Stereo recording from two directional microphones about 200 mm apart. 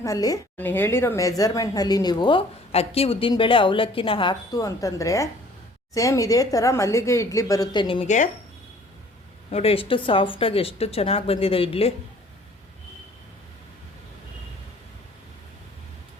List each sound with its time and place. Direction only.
0.0 s a woman's voice: 15° left (ahead or behind); by 8.3 s 35° left (ahead or behind)
9.5 s a woman's voice: 30° left (ahead or behind)